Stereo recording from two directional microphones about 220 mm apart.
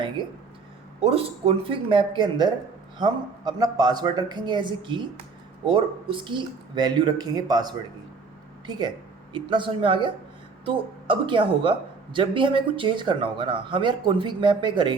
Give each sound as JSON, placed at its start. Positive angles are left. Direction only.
{"t": 1.0, "sound": "a woman's voice", "side_deg": -25}